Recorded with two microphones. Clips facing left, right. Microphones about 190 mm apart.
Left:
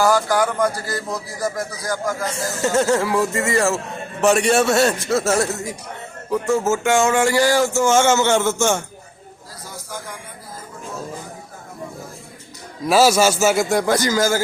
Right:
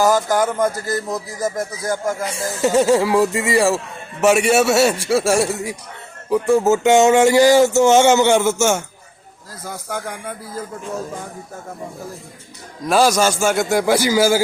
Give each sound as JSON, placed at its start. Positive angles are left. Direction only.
{"t": 0.0, "sound": "speech", "side_deg": -20}
{"t": 2.2, "sound": "speech", "side_deg": -15}
{"t": 9.6, "sound": "speech", "side_deg": -60}
{"t": 12.9, "sound": "a man's voice", "side_deg": 5}